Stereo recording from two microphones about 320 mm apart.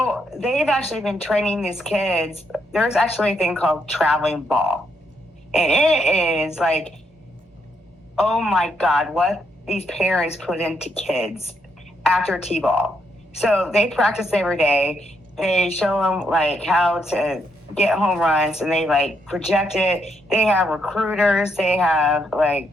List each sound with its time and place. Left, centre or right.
0.0 s speech: centre
8.4 s speech: centre
13.4 s speech: centre